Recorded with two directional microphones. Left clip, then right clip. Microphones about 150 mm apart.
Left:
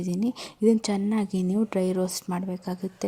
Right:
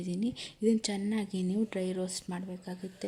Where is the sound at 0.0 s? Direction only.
35° left (ahead or behind).